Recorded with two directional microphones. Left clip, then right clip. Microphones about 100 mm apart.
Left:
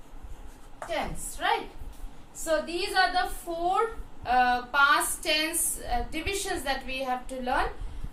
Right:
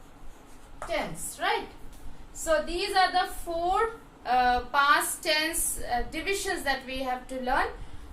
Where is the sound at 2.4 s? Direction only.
Centre (ahead or behind).